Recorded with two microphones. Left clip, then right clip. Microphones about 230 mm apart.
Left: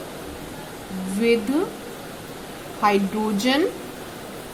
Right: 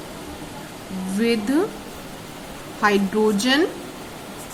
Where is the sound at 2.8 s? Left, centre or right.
Centre.